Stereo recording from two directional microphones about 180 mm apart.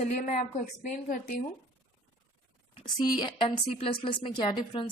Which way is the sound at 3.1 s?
25° left (ahead or behind).